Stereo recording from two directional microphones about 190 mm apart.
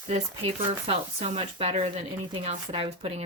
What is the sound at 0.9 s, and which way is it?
Speech, 35° right (ahead or behind).